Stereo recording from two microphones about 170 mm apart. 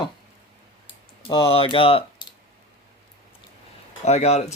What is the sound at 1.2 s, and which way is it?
Speech, 30° left (ahead or behind).